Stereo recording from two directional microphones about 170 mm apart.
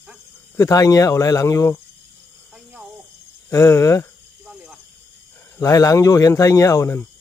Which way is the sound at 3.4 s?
15° left (ahead or behind).